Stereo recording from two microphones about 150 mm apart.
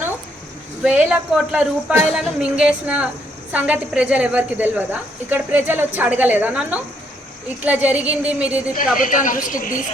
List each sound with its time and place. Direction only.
0.8 s a woman's voice: 10° right (ahead or behind)
9.0 s a woman's voice: 60° left (ahead or behind)